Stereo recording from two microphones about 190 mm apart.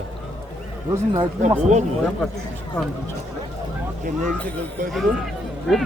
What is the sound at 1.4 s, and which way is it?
Speech, 40° right (ahead or behind).